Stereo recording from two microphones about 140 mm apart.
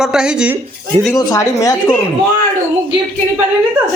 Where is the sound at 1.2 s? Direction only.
25° left (ahead or behind).